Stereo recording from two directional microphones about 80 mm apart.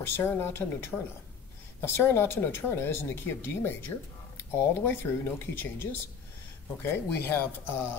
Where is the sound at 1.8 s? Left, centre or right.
Left.